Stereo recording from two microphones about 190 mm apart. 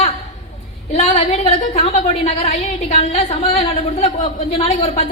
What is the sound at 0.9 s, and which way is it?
A woman's voice, 35° left (ahead or behind).